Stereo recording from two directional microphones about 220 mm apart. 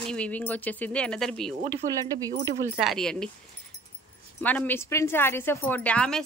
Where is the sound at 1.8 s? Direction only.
35° right (ahead or behind).